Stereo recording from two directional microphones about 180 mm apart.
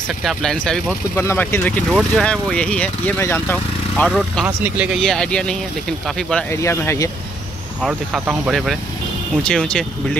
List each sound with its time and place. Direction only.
0.2 s speech: centre (ahead or behind)
2.0 s speech: centre (ahead or behind)
4.6 s speech: 10° right (ahead or behind)
6.5 s speech: 15° left (ahead or behind)
7.8 s speech: 5° right (ahead or behind)